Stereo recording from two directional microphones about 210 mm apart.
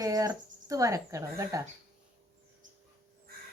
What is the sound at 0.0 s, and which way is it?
Speech, 15° right (ahead or behind).